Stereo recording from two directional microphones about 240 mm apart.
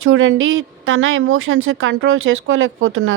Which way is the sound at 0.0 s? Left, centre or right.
Right.